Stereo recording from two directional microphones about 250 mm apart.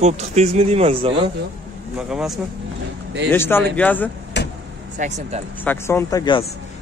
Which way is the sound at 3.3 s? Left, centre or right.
Centre.